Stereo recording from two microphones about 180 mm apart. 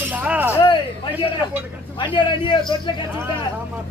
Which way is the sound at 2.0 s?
25° left (ahead or behind).